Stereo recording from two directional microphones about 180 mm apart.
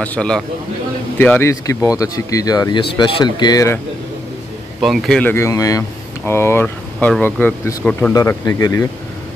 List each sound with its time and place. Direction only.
0.0 s speech: 5° left (ahead or behind)
4.8 s speech: centre (ahead or behind)
8.1 s speech: 20° left (ahead or behind)